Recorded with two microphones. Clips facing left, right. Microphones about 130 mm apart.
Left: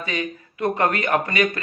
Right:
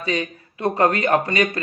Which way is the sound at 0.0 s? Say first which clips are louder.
Right 3 dB; 35° right (ahead or behind).